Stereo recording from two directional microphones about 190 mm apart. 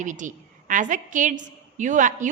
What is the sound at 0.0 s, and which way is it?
A woman's voice, 40° right (ahead or behind).